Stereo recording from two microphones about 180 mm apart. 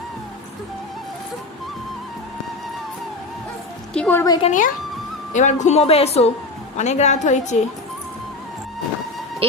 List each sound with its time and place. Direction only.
3.9 s a woman's voice: 5° left (ahead or behind)
4.2 s speech: 20° left (ahead or behind)
4.4 s speech: 45° left (ahead or behind)
9.4 s speech: 30° right (ahead or behind)